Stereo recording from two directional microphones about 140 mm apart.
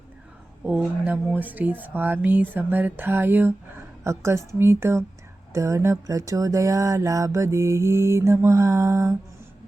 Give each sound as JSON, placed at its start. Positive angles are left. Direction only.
{"t": 0.6, "sound": "speech", "side_deg": -10}
{"t": 5.5, "sound": "mantra", "side_deg": -20}